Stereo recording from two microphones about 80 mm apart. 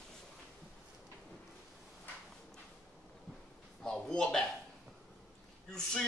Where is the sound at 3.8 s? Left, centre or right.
Centre.